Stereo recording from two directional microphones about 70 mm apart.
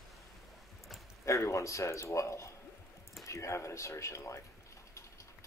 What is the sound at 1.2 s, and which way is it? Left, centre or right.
A man's voice, left.